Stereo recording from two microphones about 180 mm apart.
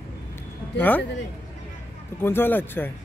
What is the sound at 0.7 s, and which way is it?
Speech, 10° left (ahead or behind).